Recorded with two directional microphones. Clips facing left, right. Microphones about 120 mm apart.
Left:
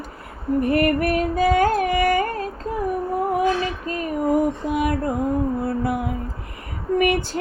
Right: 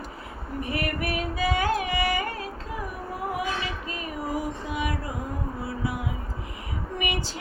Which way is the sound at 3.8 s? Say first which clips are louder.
Left 10 dB; 45° left (ahead or behind).